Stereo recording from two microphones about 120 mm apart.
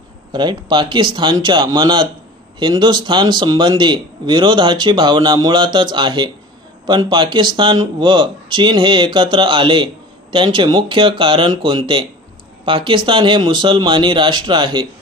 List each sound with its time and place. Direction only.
0.3 s a man's voice: 40° right (ahead or behind)